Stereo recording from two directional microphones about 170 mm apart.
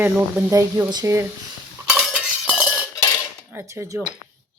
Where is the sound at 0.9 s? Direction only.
20° right (ahead or behind).